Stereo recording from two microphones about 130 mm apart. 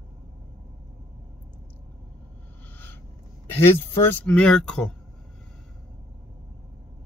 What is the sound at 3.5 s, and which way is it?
Speech, 20° left (ahead or behind).